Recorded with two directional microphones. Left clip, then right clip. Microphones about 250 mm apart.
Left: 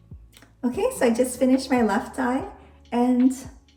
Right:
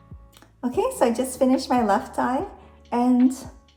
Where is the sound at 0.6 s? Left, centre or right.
Centre.